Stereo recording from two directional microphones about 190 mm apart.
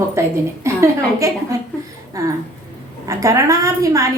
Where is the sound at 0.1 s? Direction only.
15° right (ahead or behind).